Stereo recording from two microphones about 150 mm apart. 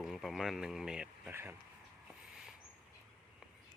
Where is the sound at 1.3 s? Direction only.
15° right (ahead or behind).